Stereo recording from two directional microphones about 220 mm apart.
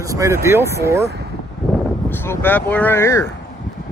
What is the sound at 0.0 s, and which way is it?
Speech, 15° right (ahead or behind).